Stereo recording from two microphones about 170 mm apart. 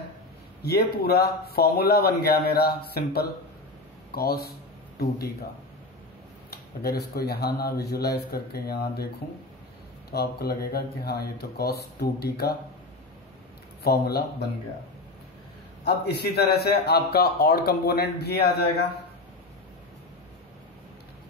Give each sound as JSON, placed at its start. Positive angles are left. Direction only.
{"t": 0.6, "sound": "a man's voice", "side_deg": 70}
{"t": 6.8, "sound": "a man's voice", "side_deg": 65}
{"t": 10.1, "sound": "a man's voice", "side_deg": 65}
{"t": 13.8, "sound": "a man's voice", "side_deg": 70}
{"t": 15.8, "sound": "a man's voice", "side_deg": 70}